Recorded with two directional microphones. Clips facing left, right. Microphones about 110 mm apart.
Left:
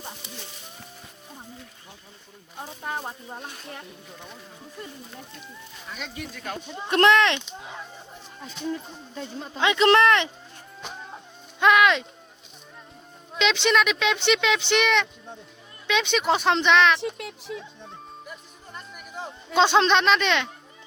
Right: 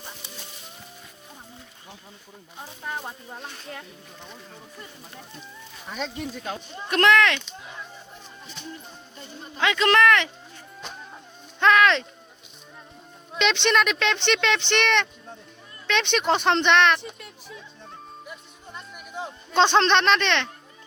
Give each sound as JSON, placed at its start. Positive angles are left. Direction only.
{"t": 6.1, "sound": "speech", "side_deg": -20}
{"t": 6.7, "sound": "speech", "side_deg": 25}
{"t": 8.7, "sound": "speech", "side_deg": 90}
{"t": 9.6, "sound": "speech", "side_deg": 20}
{"t": 11.6, "sound": "a sound", "side_deg": 10}
{"t": 13.3, "sound": "speech", "side_deg": 0}
{"t": 17.0, "sound": "a sound", "side_deg": 90}
{"t": 18.3, "sound": "music", "side_deg": 0}
{"t": 19.5, "sound": "speech", "side_deg": 5}